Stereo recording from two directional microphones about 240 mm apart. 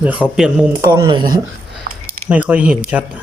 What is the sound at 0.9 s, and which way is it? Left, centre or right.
Speech, centre.